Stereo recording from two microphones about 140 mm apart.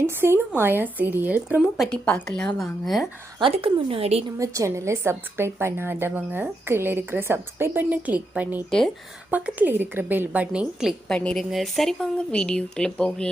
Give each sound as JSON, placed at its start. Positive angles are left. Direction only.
{"t": 0.0, "sound": "a woman's voice", "side_deg": -15}
{"t": 1.7, "sound": "a woman's voice", "side_deg": 5}
{"t": 3.4, "sound": "a woman's voice", "side_deg": -40}
{"t": 4.4, "sound": "a woman's voice", "side_deg": -20}